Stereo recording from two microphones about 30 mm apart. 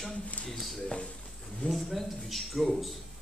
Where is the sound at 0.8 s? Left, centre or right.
Left.